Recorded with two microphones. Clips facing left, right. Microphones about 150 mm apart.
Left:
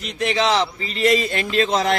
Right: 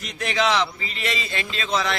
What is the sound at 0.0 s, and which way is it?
A man's voice, 25° left (ahead or behind).